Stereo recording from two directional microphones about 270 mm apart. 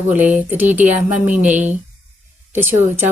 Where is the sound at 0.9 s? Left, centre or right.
Right.